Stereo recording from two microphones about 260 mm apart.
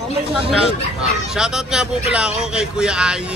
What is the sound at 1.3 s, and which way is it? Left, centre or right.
A man's voice, centre.